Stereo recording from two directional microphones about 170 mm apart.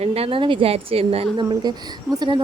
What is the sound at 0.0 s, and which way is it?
Speech, 35° right (ahead or behind).